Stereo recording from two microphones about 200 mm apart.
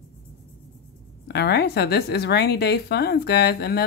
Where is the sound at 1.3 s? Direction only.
55° left (ahead or behind).